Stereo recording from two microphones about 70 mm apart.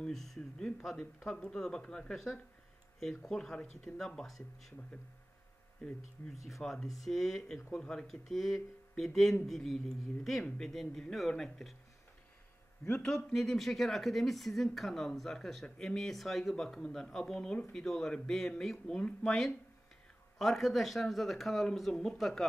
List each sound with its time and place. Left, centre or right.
0.0 s speech: centre
5.8 s speech: centre
6.4 s a woman's voice: centre
12.8 s a woman's voice: centre
20.3 s a woman's voice: centre